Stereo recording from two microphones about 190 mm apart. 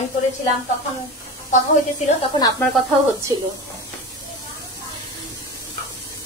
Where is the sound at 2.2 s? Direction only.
20° left (ahead or behind).